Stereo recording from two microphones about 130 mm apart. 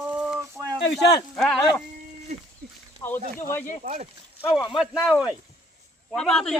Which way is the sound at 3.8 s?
60° right (ahead or behind).